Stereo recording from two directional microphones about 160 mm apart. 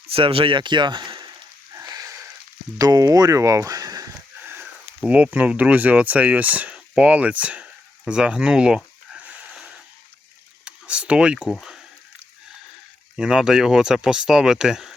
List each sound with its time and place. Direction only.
0.1 s speech: 35° right (ahead or behind)
1.7 s a sound: 20° right (ahead or behind)
2.7 s speech: 25° right (ahead or behind)
4.4 s a sound: 10° right (ahead or behind)
5.0 s speech: 10° right (ahead or behind)
10.7 s speech: 5° right (ahead or behind)
13.1 s speech: 5° right (ahead or behind)